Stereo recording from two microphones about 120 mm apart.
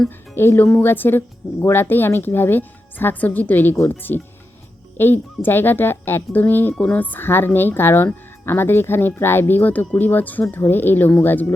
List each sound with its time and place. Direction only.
0.3 s speech: 20° left (ahead or behind)